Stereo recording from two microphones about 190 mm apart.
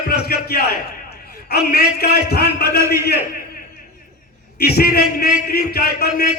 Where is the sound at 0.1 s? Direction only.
55° left (ahead or behind).